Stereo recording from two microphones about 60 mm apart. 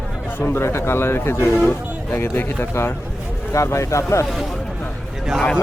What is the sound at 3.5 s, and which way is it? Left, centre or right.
Speech, left.